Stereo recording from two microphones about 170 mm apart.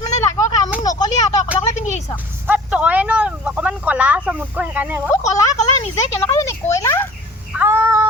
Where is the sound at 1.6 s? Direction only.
45° left (ahead or behind).